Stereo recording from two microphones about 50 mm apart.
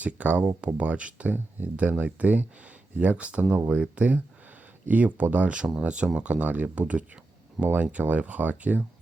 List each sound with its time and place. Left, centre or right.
0.0 s speech: right
1.3 s speech: right